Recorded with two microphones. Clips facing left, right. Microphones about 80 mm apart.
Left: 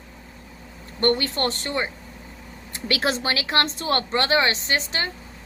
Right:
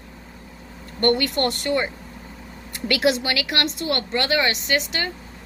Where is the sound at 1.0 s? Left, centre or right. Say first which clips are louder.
Right 2 dB; left.